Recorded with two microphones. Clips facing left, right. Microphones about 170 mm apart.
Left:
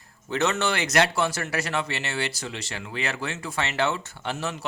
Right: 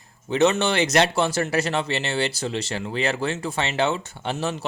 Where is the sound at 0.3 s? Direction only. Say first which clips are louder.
Right 5 dB; 20° right (ahead or behind).